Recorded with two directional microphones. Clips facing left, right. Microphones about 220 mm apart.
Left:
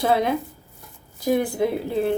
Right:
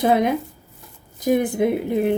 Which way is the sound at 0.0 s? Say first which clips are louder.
Right 3 dB; 15° right (ahead or behind).